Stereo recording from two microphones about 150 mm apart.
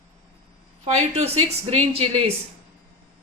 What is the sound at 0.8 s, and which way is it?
Speech, 45° right (ahead or behind).